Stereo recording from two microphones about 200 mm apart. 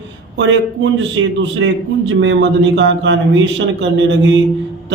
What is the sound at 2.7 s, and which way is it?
Speech, 70° right (ahead or behind).